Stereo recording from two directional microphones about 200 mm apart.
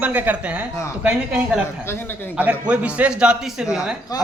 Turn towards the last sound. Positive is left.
turn(degrees=0)  # may be behind; listen again after turning